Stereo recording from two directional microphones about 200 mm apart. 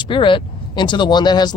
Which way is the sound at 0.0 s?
25° left (ahead or behind).